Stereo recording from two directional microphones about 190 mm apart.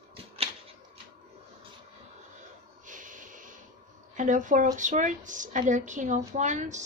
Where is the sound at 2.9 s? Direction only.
45° right (ahead or behind).